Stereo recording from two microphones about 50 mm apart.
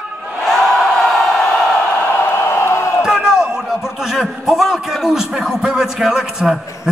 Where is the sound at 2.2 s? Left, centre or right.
Left.